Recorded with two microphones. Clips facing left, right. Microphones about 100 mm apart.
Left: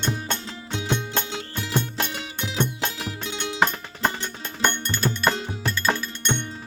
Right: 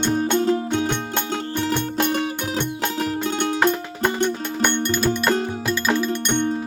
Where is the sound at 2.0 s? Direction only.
50° right (ahead or behind).